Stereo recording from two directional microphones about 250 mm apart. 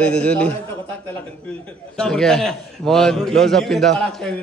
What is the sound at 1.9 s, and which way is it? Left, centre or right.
A man's voice, centre.